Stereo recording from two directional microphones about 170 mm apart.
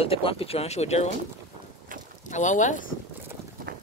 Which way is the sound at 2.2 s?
45° left (ahead or behind).